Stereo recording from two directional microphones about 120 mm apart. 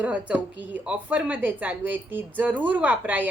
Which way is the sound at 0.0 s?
10° right (ahead or behind).